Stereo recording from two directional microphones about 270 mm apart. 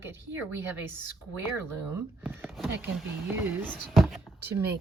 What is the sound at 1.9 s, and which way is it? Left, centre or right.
Speech, centre.